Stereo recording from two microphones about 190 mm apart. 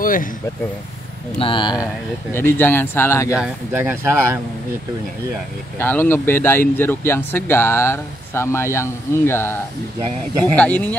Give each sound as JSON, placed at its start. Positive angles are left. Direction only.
{"t": 0.0, "sound": "vehicle", "side_deg": 45}
{"t": 1.4, "sound": "speech", "side_deg": 25}
{"t": 2.3, "sound": "speech", "side_deg": 10}
{"t": 3.3, "sound": "speech", "side_deg": -10}
{"t": 5.8, "sound": "speech", "side_deg": 10}